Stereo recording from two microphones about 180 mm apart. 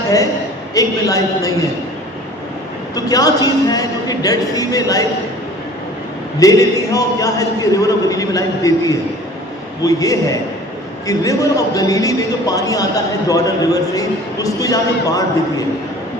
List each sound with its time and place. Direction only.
0.7 s a man's voice: 20° left (ahead or behind)
2.9 s a man's voice: 20° left (ahead or behind)
6.4 s a man's voice: 20° left (ahead or behind)